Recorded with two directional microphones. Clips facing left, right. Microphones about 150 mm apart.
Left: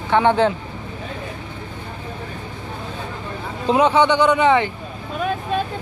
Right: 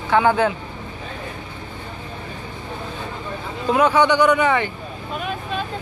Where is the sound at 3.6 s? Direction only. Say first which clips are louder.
Left 1 dB; 25° left (ahead or behind).